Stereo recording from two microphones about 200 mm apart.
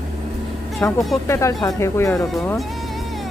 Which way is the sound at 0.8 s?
10° left (ahead or behind).